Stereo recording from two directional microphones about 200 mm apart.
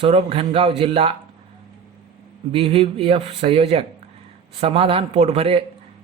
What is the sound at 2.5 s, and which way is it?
A man's voice, 30° right (ahead or behind).